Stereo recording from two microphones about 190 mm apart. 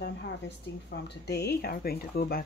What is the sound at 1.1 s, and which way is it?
Speech, 60° left (ahead or behind).